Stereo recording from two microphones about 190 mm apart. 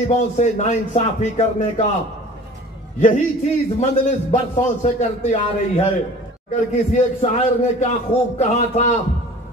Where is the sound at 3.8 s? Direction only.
35° left (ahead or behind).